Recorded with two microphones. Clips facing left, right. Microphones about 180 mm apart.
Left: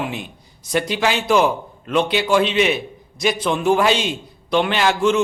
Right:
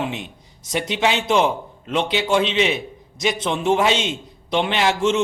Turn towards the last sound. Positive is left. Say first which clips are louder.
# left 2 dB
turn(degrees=-25)  # may be behind; listen again after turning